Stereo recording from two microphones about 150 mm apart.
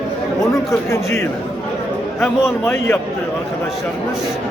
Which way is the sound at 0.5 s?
20° left (ahead or behind).